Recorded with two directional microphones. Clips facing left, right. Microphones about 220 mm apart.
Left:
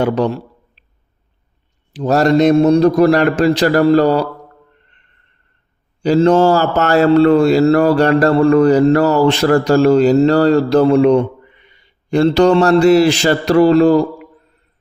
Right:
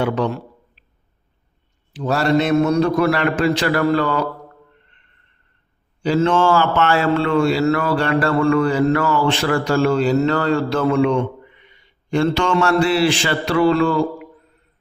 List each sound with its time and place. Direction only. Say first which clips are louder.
0.0 s a sound: left 4 dB; 40° left (ahead or behind)
1.9 s speech: left 5 dB; 40° left (ahead or behind)
6.0 s speech: left 6 dB; 40° left (ahead or behind)